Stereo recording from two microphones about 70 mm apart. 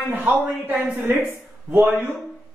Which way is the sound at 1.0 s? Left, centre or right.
Right.